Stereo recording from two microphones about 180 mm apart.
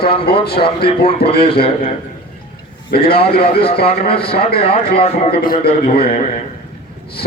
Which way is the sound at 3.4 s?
30° left (ahead or behind).